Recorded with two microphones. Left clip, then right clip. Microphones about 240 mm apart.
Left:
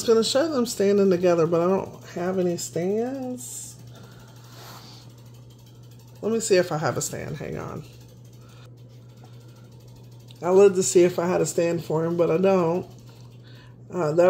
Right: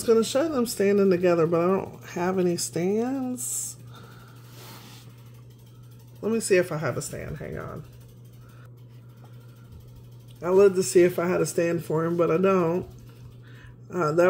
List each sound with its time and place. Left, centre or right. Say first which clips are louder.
0.0 s speech: left 2 dB; centre
6.2 s speech: left 2 dB; centre
7.1 s speech: left 3 dB; centre
10.4 s speech: left 2 dB; centre
13.8 s speech: left 1 dB; centre